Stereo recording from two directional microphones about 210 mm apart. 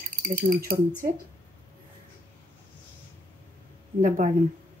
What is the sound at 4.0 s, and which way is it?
Speech, 35° right (ahead or behind).